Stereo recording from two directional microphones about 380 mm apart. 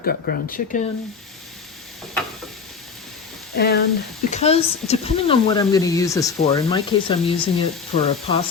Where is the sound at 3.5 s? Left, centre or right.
Left.